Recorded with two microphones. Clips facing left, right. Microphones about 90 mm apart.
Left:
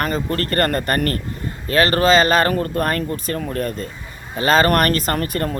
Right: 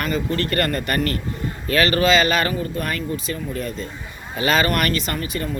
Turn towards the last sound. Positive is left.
turn(degrees=55)  # may be behind; listen again after turning